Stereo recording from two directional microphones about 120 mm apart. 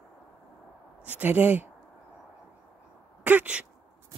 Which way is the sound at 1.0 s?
15° right (ahead or behind).